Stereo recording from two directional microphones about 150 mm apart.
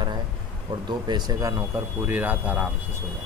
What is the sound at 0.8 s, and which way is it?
Speech, 30° right (ahead or behind).